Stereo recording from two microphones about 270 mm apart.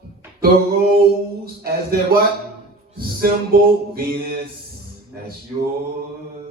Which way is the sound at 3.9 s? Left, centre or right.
Right.